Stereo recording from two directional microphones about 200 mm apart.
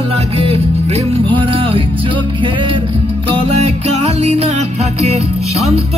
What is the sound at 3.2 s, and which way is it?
Music, 25° right (ahead or behind).